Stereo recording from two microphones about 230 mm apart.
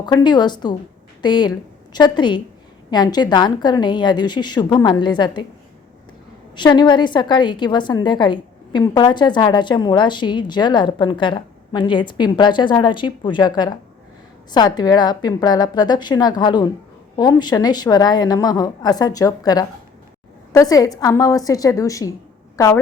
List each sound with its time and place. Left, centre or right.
0.0 s a woman's voice: centre
6.6 s a woman's voice: centre